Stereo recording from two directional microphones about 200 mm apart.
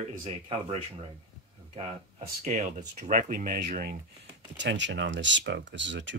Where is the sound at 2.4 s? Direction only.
40° right (ahead or behind).